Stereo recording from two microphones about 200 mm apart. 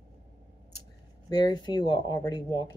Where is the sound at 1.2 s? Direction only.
20° left (ahead or behind).